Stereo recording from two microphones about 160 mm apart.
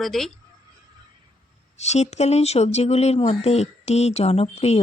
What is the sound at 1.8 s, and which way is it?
Speech, 45° left (ahead or behind).